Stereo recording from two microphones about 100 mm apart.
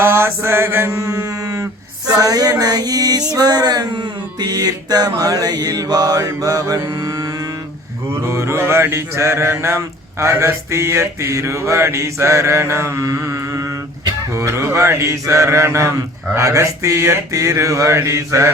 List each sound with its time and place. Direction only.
0.0 s mantra: 25° right (ahead or behind)
2.0 s a sound: 40° right (ahead or behind)
8.2 s mantra: 30° right (ahead or behind)